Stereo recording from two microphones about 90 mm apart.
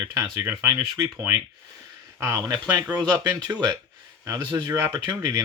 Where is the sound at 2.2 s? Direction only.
45° right (ahead or behind).